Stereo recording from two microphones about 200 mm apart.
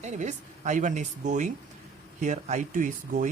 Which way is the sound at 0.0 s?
35° right (ahead or behind).